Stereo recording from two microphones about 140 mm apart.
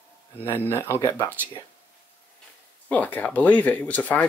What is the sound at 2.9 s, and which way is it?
Speech, 10° left (ahead or behind).